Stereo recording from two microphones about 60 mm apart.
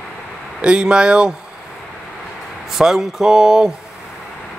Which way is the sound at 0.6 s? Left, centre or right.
Centre.